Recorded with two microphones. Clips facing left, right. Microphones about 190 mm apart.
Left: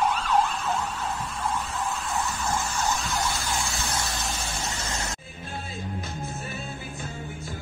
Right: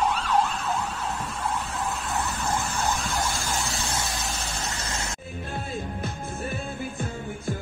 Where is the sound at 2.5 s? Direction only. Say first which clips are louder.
Even; 55° right (ahead or behind); by 3.8 s 40° right (ahead or behind).